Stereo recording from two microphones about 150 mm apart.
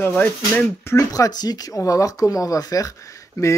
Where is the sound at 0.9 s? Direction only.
25° left (ahead or behind).